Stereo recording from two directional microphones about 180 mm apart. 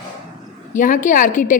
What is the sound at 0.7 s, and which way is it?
Speech, 45° left (ahead or behind).